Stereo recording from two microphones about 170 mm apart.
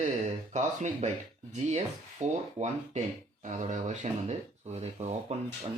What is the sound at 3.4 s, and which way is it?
Speech, 45° right (ahead or behind).